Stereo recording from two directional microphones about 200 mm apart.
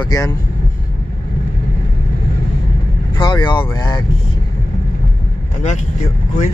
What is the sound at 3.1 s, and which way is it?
Speech, 20° left (ahead or behind).